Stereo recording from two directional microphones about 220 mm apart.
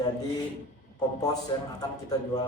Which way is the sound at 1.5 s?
20° left (ahead or behind).